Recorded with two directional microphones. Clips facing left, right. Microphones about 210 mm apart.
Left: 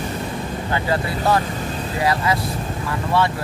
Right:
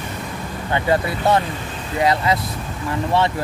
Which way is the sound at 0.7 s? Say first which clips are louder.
Right 4 dB; 25° right (ahead or behind).